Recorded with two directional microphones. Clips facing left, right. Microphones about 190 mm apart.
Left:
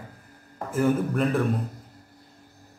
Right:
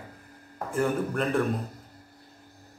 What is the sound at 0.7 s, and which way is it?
Speech, centre (ahead or behind).